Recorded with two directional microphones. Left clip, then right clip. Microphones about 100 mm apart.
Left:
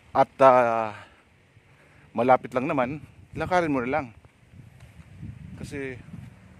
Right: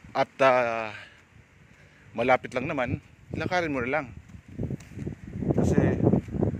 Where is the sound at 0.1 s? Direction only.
90° left.